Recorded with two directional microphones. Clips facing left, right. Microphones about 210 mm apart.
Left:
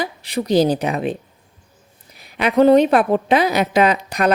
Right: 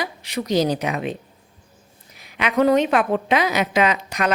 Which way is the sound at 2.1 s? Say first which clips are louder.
Left 5 dB; 35° left (ahead or behind).